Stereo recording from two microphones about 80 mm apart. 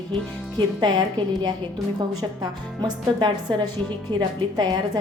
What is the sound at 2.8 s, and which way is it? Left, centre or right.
A woman's voice, right.